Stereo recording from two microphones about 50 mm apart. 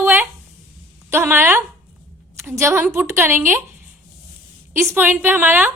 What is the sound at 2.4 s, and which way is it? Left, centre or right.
Speech, right.